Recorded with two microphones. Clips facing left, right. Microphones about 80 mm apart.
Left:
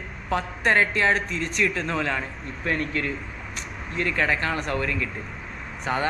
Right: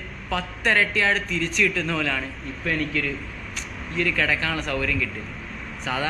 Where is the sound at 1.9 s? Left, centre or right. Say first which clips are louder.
Even; left.